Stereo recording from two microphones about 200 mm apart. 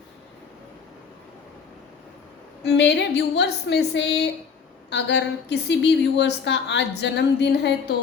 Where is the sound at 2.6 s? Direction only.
60° left (ahead or behind).